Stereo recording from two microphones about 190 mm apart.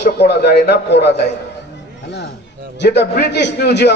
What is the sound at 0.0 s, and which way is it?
A man's voice, 60° left (ahead or behind).